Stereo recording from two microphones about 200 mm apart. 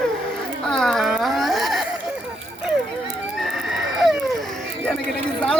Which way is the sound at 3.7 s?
Centre (ahead or behind).